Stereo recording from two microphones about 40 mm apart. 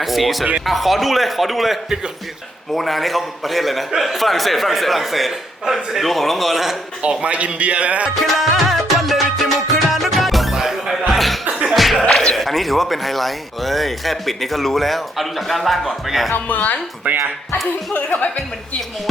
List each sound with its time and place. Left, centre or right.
0.0 s speech: centre
5.6 s speech: centre
6.0 s speech: centre
7.0 s speech: right
8.1 s music: centre
11.1 s music: centre
11.7 s speech: centre
16.3 s speech: left
17.9 s speech: left